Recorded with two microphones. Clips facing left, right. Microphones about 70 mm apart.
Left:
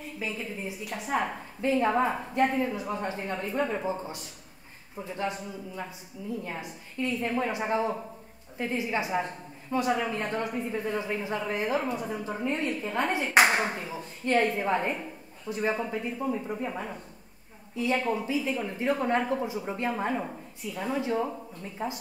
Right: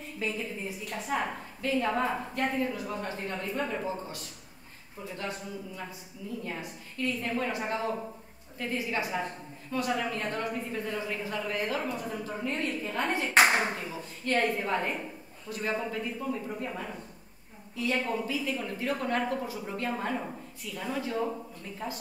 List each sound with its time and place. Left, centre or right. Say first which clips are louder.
0.2 s speech: right 1 dB; centre
1.6 s speech: left 4 dB; left
6.4 s speech: left 1 dB; centre
13.0 s speech: left 1 dB; centre
13.7 s speech: left 1 dB; left
18.0 s speech: left 3 dB; centre